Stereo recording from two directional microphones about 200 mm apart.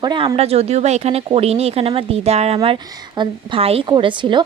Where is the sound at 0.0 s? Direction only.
20° right (ahead or behind).